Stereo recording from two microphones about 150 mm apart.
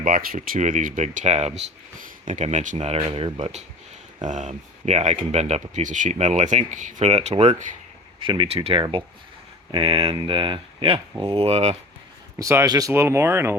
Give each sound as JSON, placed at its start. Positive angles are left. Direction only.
{"t": 0.0, "sound": "speech", "side_deg": -70}
{"t": 8.2, "sound": "speech", "side_deg": -35}
{"t": 12.4, "sound": "speech", "side_deg": -20}